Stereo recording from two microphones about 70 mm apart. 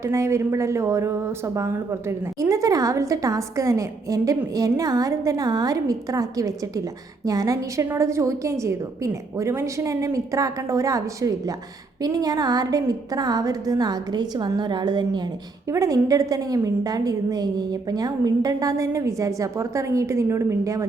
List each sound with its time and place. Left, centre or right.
0.0 s a woman's voice: right
12.0 s a woman's voice: right
15.7 s a woman's voice: right